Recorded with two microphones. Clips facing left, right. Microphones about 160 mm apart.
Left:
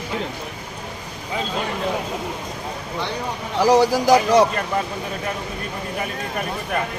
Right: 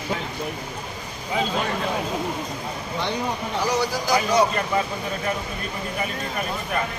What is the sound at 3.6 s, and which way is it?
Speech, 90° left.